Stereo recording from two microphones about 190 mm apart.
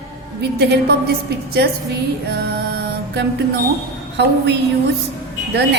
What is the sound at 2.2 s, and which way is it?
Music, 55° right (ahead or behind).